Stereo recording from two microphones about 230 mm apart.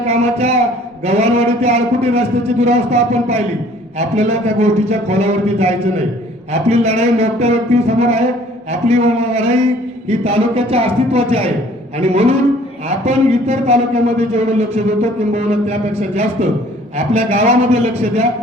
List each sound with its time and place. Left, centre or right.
0.0 s a man's voice: right